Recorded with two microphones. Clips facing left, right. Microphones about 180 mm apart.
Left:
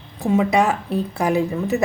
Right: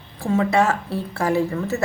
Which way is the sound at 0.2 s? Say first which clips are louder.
Left 1 dB; 15° left (ahead or behind).